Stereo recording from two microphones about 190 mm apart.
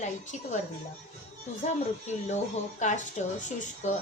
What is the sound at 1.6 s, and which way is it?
A woman's voice, 40° left (ahead or behind).